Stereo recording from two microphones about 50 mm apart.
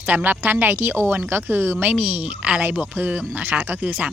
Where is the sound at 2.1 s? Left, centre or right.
Right.